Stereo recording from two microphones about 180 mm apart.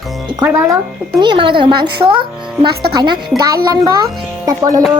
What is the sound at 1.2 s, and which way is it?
A child's voice, 25° right (ahead or behind).